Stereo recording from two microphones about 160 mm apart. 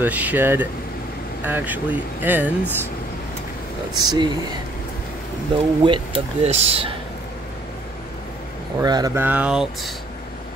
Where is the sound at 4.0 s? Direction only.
25° right (ahead or behind).